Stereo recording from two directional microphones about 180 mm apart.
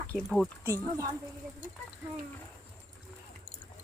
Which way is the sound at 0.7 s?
15° right (ahead or behind).